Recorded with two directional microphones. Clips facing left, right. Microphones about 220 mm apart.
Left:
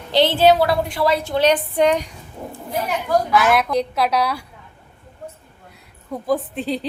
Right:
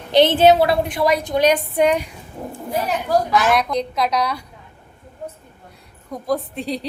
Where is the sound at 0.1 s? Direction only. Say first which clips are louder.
Right 2 dB; 20° right (ahead or behind).